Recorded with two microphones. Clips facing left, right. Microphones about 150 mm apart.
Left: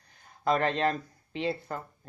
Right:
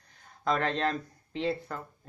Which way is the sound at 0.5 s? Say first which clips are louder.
Left 2 dB; 5° left (ahead or behind).